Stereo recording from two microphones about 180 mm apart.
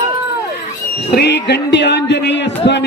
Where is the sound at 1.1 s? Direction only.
65° left (ahead or behind).